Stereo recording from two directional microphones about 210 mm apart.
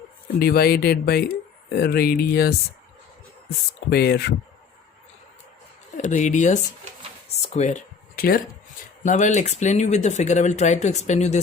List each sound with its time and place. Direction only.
0.3 s speech: 45° left (ahead or behind)
3.8 s speech: 50° left (ahead or behind)
6.0 s speech: 35° left (ahead or behind)